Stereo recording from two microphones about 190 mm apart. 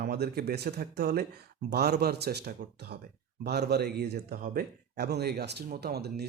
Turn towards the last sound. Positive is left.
turn(degrees=-60)  # may be behind; listen again after turning